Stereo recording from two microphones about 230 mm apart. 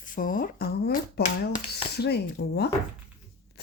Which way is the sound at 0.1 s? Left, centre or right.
Left.